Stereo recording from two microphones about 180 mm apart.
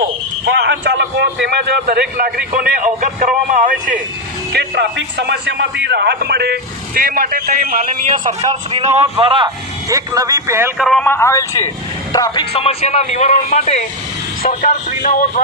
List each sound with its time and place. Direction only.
0.4 s a man's voice: 75° right (ahead or behind); by 4.0 s 50° right (ahead or behind)
4.5 s a man's voice: 70° right (ahead or behind); by 8.4 s 50° right (ahead or behind)
8.4 s a man's voice: 30° right (ahead or behind)
9.9 s a man's voice: 20° right (ahead or behind)
10.8 s a man's voice: centre (ahead or behind); by 15.3 s 45° left (ahead or behind)